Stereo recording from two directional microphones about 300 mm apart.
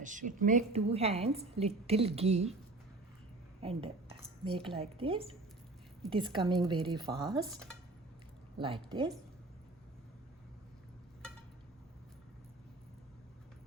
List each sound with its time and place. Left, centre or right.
0.0 s a woman's voice: right
3.6 s a woman's voice: centre
8.5 s speech: centre